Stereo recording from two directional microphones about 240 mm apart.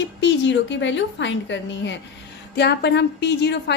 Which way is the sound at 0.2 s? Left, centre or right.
Left.